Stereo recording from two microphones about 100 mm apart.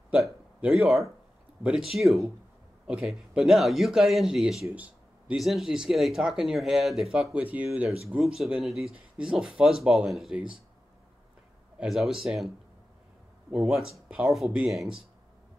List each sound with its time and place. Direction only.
0.6 s speech: 5° right (ahead or behind)
4.7 s a sound: 15° right (ahead or behind)
5.4 s speech: centre (ahead or behind)
7.3 s speech: 15° right (ahead or behind)
8.2 s speech: 5° right (ahead or behind)
11.8 s speech: 5° right (ahead or behind)
13.5 s speech: 5° right (ahead or behind)